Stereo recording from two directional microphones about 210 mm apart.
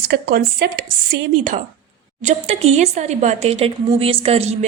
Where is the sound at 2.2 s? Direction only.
30° right (ahead or behind).